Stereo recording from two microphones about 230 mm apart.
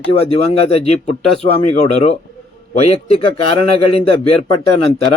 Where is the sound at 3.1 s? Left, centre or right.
Left.